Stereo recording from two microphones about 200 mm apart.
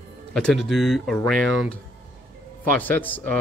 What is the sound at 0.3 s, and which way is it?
Speech, centre (ahead or behind).